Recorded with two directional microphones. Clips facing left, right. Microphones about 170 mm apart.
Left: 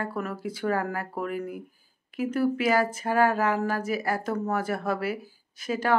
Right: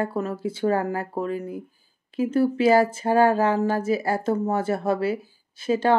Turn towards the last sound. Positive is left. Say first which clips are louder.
# right 6 dB
turn(degrees=-25)  # may be behind; listen again after turning